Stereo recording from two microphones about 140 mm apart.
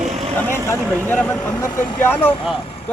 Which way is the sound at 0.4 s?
15° left (ahead or behind).